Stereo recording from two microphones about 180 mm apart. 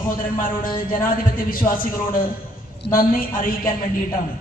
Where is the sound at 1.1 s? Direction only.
50° left (ahead or behind).